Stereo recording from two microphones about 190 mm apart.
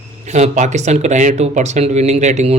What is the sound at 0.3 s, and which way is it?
Speech, 35° right (ahead or behind).